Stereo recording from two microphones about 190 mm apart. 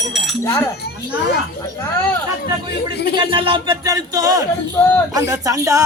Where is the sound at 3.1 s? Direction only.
25° right (ahead or behind).